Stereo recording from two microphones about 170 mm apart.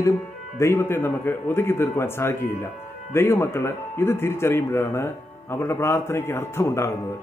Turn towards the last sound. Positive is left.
turn(degrees=15)  # may be behind; listen again after turning